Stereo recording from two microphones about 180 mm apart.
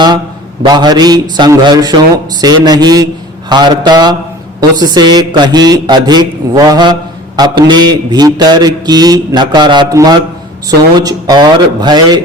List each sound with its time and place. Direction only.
0.6 s a man's voice: 25° right (ahead or behind)